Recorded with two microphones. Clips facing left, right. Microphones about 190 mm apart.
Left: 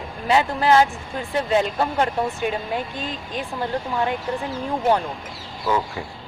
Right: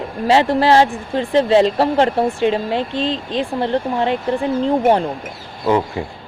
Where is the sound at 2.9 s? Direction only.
80° right.